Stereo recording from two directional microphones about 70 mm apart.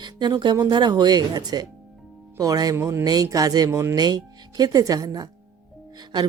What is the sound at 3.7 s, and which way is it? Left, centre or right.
Speech, right.